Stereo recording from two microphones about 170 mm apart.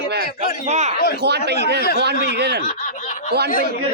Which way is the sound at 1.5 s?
75° right (ahead or behind).